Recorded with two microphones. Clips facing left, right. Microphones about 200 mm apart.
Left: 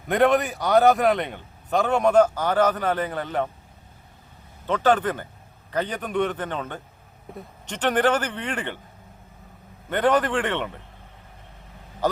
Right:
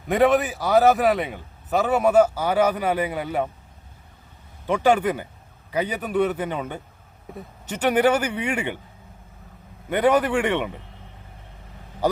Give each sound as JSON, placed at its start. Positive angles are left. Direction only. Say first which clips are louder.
{"t": 0.1, "sound": "a man's voice", "louder": "right 1 dB", "side_deg": 0}
{"t": 4.6, "sound": "speech", "louder": "right 2 dB", "side_deg": -10}
{"t": 9.9, "sound": "speech", "louder": "right 2 dB", "side_deg": -10}